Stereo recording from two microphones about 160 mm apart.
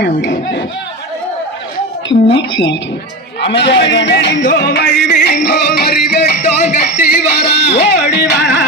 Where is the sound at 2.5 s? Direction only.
90° left.